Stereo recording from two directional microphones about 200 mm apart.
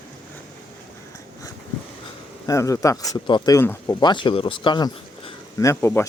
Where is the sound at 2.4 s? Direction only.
15° left (ahead or behind).